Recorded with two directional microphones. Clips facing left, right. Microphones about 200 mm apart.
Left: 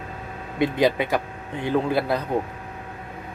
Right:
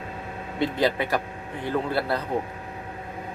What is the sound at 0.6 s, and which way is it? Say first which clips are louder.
Speech: left 3 dB; 15° left (ahead or behind).